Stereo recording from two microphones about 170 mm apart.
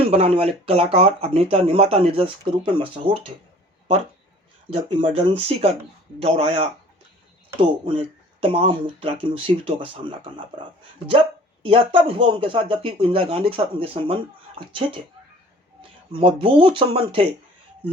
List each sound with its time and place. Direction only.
0.0 s speech: 35° right (ahead or behind)
4.7 s speech: 35° right (ahead or behind)
11.6 s speech: 35° right (ahead or behind)
16.1 s speech: 30° right (ahead or behind)